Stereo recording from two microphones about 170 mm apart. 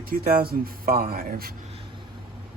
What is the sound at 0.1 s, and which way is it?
Speech, 60° right (ahead or behind).